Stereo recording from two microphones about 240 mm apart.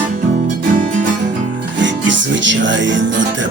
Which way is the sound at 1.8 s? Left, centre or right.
Right.